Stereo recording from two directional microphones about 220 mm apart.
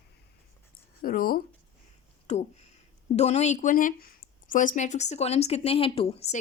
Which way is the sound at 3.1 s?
30° left (ahead or behind).